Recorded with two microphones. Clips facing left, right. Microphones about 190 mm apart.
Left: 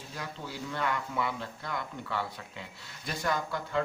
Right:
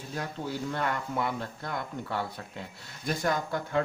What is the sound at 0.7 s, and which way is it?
Speech, 45° right (ahead or behind).